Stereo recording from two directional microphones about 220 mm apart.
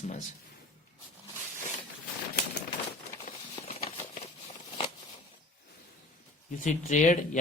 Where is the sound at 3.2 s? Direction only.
30° left (ahead or behind).